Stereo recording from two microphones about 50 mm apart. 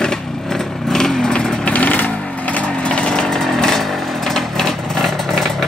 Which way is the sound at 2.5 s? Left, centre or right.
Left.